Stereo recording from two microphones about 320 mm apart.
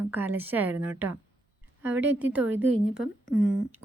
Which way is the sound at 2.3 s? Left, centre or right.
Centre.